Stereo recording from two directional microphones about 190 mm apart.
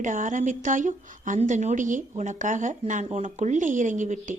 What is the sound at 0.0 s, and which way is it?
A woman's voice, 40° right (ahead or behind).